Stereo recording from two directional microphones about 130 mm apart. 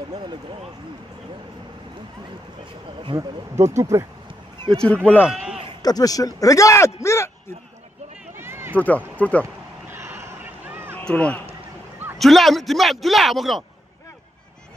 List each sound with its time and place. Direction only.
0.1 s speech: 35° right (ahead or behind)
3.2 s speech: 25° right (ahead or behind)
4.6 s speech: 5° left (ahead or behind)
5.3 s bleat: 5° right (ahead or behind)
5.8 s speech: 30° left (ahead or behind)
8.4 s run: 20° right (ahead or behind)
8.7 s speech: 10° left (ahead or behind)
9.4 s vehicle: 20° right (ahead or behind)
10.7 s a sound: 15° right (ahead or behind)
11.0 s speech: 10° left (ahead or behind)